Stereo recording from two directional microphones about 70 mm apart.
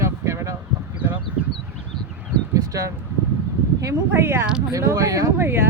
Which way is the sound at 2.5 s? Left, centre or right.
Right.